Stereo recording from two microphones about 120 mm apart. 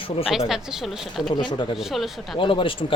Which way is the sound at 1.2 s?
40° left (ahead or behind).